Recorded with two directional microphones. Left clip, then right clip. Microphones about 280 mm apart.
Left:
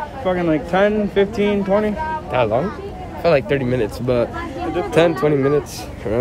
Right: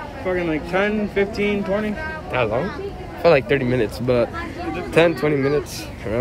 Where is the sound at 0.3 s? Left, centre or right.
Left.